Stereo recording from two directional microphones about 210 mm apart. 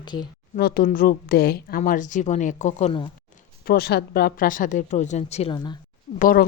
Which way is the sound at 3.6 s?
50° left (ahead or behind).